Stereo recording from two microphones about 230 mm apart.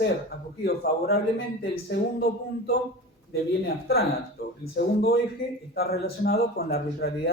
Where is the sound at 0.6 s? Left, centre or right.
Left.